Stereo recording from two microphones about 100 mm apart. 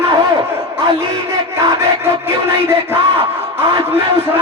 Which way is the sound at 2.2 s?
25° right (ahead or behind).